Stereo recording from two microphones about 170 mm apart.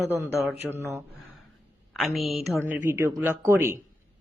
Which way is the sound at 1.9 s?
Centre (ahead or behind).